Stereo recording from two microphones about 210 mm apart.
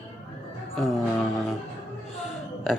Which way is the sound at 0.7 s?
Centre (ahead or behind).